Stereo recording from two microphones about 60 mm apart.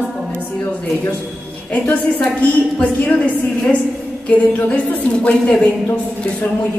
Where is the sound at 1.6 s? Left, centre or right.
Left.